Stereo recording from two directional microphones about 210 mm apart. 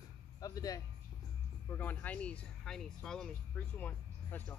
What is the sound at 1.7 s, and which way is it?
Speech, 10° left (ahead or behind).